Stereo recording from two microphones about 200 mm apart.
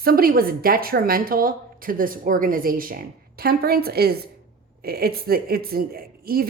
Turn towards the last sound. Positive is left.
turn(degrees=-50)  # may be behind; listen again after turning